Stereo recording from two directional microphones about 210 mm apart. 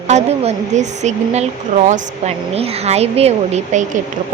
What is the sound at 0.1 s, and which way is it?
A woman's voice, 30° right (ahead or behind).